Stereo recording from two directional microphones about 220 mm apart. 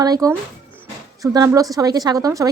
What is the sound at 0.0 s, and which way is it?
A woman's voice, 15° right (ahead or behind).